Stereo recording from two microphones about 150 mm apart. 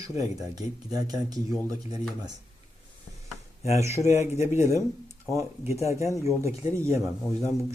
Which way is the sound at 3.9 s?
50° left (ahead or behind).